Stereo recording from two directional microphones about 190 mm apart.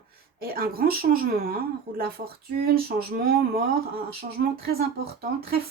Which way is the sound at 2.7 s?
55° right (ahead or behind).